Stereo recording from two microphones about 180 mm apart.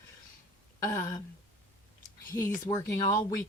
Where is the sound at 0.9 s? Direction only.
20° left (ahead or behind).